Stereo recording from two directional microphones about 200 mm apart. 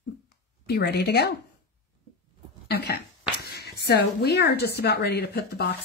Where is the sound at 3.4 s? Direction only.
50° left (ahead or behind).